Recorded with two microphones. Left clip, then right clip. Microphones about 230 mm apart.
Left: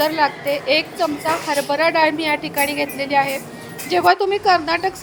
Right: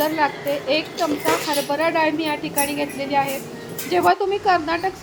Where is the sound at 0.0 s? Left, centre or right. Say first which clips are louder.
Left 3 dB; left.